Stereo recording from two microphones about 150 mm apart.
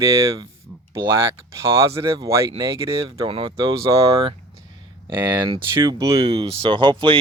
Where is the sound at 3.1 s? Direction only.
40° right (ahead or behind).